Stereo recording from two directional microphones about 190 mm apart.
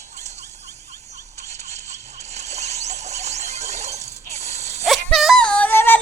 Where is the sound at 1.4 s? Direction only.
35° right (ahead or behind).